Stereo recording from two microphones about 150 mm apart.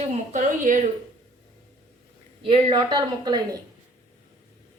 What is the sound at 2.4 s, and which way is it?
A woman's voice, 35° right (ahead or behind).